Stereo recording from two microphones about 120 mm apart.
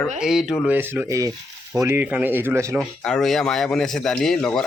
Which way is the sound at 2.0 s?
15° right (ahead or behind).